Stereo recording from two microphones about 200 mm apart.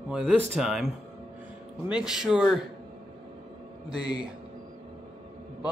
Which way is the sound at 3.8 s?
20° left (ahead or behind).